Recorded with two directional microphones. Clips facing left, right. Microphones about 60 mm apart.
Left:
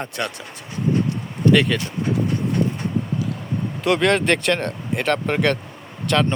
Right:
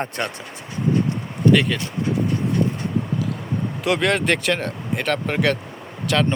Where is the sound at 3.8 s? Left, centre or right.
Centre.